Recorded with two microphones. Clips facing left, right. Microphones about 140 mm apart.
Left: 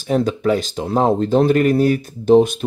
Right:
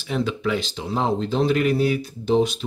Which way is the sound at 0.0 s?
45° left (ahead or behind).